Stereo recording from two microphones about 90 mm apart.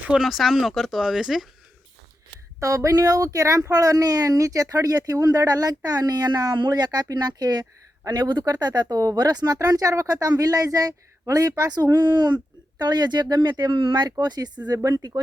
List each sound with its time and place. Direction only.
0.0 s speech: 5° right (ahead or behind)
2.6 s speech: 40° right (ahead or behind)
14.7 s speech: 40° right (ahead or behind)